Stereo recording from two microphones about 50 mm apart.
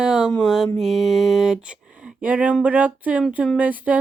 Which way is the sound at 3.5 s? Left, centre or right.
Right.